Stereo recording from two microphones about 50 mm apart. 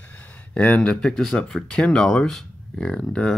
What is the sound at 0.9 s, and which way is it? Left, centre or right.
Speech, centre.